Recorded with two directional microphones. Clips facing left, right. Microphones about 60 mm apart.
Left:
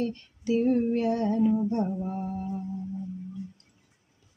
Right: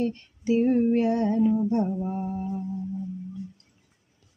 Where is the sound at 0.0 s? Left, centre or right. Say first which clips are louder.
Right 3 dB; right.